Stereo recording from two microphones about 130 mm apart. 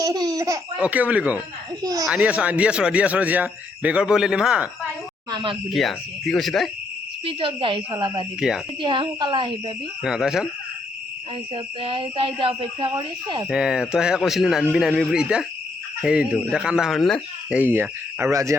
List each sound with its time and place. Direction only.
0.0 s laughter: 30° right (ahead or behind)
0.8 s speech: 10° right (ahead or behind)
1.8 s speech: 30° right (ahead or behind)
2.0 s speech: 10° right (ahead or behind)
5.3 s speech: 40° right (ahead or behind)
5.7 s a man's voice: centre (ahead or behind)
7.3 s speech: 45° right (ahead or behind)
8.4 s a man's voice: 5° right (ahead or behind)
8.8 s speech: 40° right (ahead or behind)
10.0 s a man's voice: 5° right (ahead or behind)
11.5 s speech: 40° right (ahead or behind)
13.5 s a man's voice: 5° right (ahead or behind)
17.5 s speech: 15° right (ahead or behind)